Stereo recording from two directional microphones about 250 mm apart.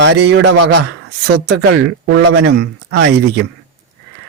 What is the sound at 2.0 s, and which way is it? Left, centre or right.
Speech, right.